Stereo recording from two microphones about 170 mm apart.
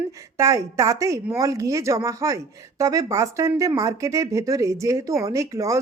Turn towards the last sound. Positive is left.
turn(degrees=-20)  # may be behind; listen again after turning